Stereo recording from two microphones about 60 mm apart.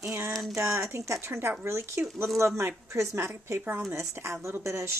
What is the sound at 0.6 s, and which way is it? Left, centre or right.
Speech, right.